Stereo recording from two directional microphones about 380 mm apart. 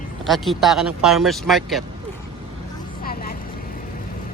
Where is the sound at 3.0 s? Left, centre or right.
Left.